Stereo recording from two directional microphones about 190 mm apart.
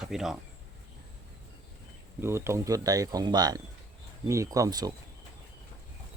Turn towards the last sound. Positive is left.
turn(degrees=-20)  # may be behind; listen again after turning